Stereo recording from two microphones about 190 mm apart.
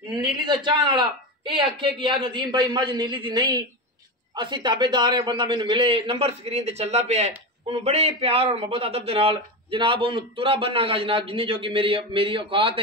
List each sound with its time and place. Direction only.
0.5 s a man's voice: 25° right (ahead or behind)